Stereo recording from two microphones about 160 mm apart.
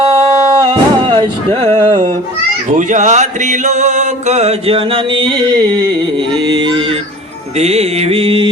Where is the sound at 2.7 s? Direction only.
50° right (ahead or behind); by 5.5 s 30° right (ahead or behind).